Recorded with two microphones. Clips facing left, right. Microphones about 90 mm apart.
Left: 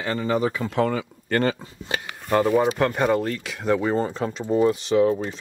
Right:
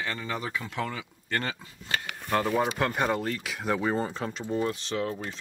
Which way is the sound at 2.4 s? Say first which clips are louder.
Left 7 dB; 5° left (ahead or behind).